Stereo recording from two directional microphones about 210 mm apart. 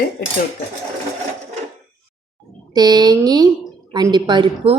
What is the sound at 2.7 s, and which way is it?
A woman's voice, 20° right (ahead or behind).